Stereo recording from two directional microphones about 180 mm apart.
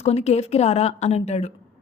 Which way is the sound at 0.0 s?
35° left (ahead or behind).